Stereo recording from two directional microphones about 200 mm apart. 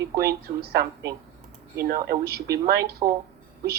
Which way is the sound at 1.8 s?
50° right (ahead or behind).